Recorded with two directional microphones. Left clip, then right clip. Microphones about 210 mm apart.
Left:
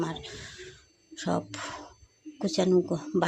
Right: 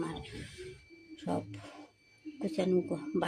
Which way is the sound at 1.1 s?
15° left (ahead or behind).